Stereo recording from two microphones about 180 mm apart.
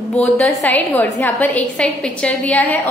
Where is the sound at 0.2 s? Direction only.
Centre (ahead or behind).